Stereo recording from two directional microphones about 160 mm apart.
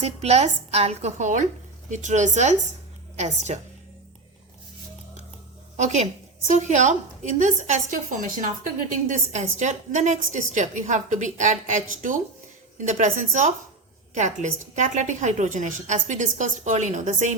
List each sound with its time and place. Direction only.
0.0 s a woman's voice: 40° right (ahead or behind)
5.7 s a woman's voice: 45° right (ahead or behind)